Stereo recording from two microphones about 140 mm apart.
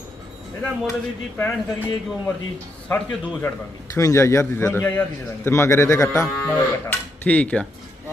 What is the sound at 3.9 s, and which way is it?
A man's voice, 25° left (ahead or behind).